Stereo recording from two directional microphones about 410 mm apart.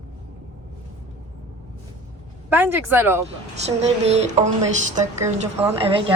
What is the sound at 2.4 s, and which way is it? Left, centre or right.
Speech, centre.